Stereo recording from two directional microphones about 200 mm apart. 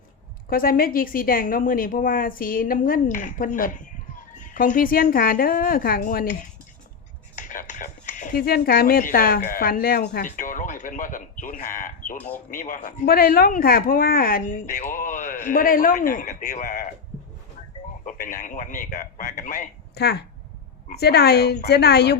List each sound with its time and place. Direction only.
0.5 s a woman's voice: 45° left (ahead or behind)
7.3 s speech: 40° left (ahead or behind)
18.3 s speech: 40° left (ahead or behind)
20.0 s a woman's voice: 55° left (ahead or behind)